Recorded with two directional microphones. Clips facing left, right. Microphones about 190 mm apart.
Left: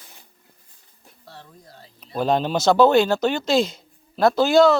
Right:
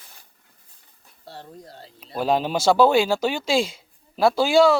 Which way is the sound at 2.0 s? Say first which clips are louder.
Left 1 dB; 5° right (ahead or behind).